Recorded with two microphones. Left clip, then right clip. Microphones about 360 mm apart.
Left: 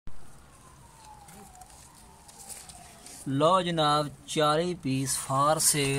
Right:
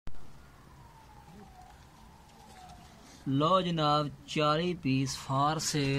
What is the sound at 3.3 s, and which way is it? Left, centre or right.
Speech, centre.